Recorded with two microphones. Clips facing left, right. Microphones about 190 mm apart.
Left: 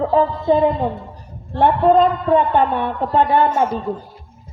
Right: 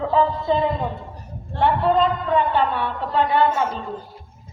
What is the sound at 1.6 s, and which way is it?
A woman's voice, 50° left (ahead or behind).